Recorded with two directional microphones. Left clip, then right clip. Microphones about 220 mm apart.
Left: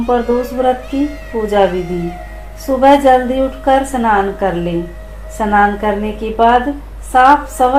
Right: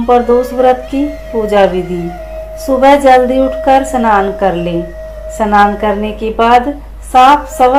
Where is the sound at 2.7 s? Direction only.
25° right (ahead or behind).